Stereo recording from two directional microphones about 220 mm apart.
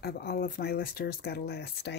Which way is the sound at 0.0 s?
45° left (ahead or behind).